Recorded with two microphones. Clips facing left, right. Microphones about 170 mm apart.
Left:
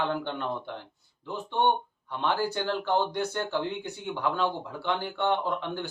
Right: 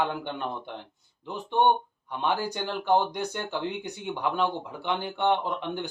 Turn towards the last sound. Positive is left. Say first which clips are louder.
# even
turn(degrees=-20)  # may be behind; listen again after turning